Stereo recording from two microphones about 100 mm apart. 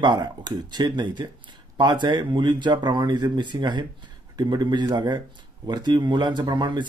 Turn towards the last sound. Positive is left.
turn(degrees=-45)  # may be behind; listen again after turning